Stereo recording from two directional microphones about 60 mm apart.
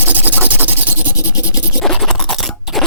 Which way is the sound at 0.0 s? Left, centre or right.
Right.